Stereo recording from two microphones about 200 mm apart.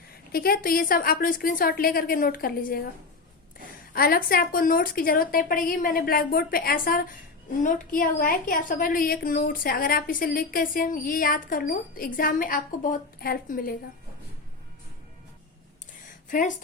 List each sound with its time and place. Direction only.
0.3 s a woman's voice: 50° left (ahead or behind)
3.9 s a woman's voice: 50° left (ahead or behind)